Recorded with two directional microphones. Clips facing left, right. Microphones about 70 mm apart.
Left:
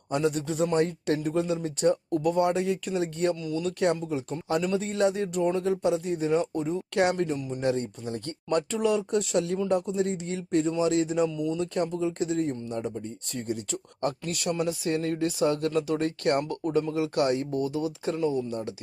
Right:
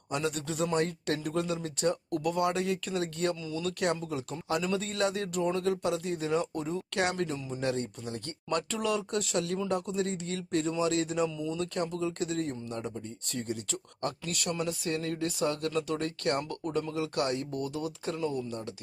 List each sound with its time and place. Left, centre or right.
0.1 s speech: left
11.7 s speech: left